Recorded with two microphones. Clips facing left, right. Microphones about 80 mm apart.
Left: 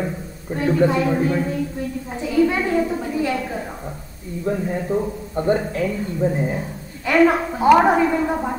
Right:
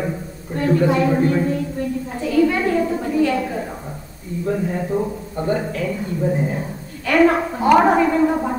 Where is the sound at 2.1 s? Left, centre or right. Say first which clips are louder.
Right 1 dB; centre.